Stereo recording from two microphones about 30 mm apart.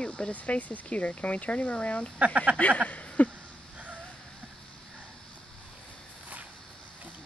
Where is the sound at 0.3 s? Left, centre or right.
Left.